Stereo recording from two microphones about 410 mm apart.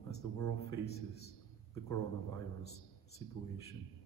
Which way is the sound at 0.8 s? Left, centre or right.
Left.